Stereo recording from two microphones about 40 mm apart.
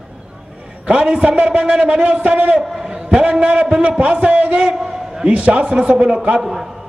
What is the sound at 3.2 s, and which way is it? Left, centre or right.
A man's voice, right.